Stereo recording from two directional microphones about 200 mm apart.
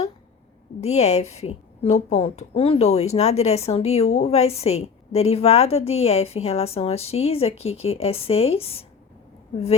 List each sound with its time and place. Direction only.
0.8 s a woman's voice: 35° left (ahead or behind)